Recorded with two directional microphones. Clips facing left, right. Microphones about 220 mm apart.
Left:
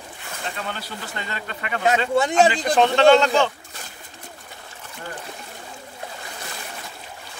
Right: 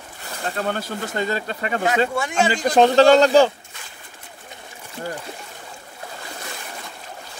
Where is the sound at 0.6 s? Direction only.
50° right (ahead or behind).